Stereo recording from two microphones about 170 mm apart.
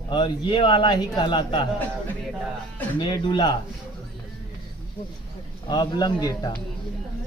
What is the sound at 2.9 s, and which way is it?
Speech, 25° left (ahead or behind).